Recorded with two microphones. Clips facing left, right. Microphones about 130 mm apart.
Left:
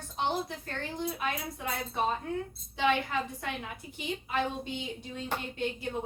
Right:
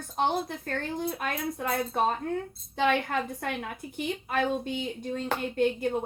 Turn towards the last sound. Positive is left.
turn(degrees=-50)  # may be behind; listen again after turning